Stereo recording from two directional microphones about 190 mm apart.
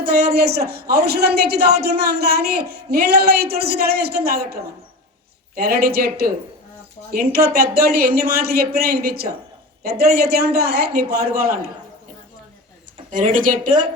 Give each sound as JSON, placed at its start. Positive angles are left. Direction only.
{"t": 0.0, "sound": "a woman's voice", "side_deg": -55}
{"t": 5.5, "sound": "a woman's voice", "side_deg": -55}
{"t": 13.1, "sound": "speech", "side_deg": -45}